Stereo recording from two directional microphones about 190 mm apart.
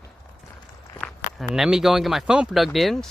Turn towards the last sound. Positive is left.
turn(degrees=0)  # may be behind; listen again after turning